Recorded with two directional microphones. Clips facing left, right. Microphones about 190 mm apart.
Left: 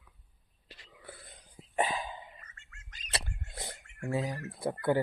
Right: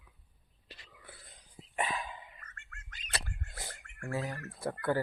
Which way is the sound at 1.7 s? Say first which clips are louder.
Left 4 dB; 30° left (ahead or behind).